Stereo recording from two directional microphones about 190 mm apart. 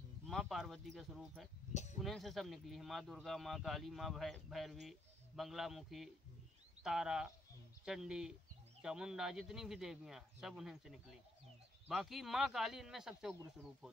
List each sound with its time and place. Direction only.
0.3 s speech: centre (ahead or behind)
1.7 s a sound: 40° left (ahead or behind)
2.0 s speech: centre (ahead or behind)